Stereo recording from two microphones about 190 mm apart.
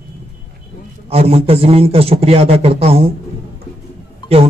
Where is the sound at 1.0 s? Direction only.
30° right (ahead or behind).